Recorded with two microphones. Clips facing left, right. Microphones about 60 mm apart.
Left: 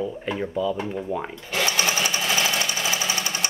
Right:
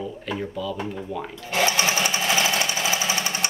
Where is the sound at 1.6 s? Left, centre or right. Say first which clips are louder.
Right 2 dB; centre.